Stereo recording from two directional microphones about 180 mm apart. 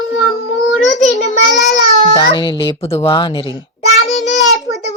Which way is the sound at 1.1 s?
40° left (ahead or behind).